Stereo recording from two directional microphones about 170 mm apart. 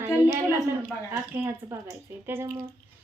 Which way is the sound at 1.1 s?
15° right (ahead or behind).